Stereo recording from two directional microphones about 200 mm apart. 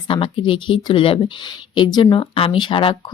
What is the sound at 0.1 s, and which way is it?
Speech, 25° left (ahead or behind).